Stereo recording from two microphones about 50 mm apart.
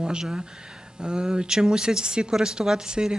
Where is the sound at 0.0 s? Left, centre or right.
Centre.